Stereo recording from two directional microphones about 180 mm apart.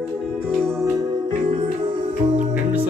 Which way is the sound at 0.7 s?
20° right (ahead or behind).